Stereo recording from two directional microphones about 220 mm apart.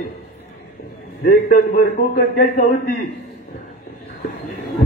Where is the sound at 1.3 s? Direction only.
40° left (ahead or behind).